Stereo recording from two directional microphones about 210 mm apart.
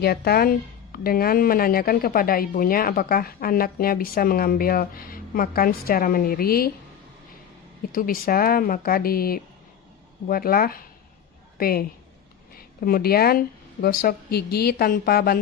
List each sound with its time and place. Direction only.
0.0 s speech: 45° left (ahead or behind)
7.9 s a woman's voice: 45° left (ahead or behind)